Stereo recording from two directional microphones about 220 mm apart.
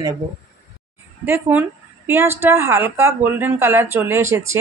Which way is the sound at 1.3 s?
10° right (ahead or behind).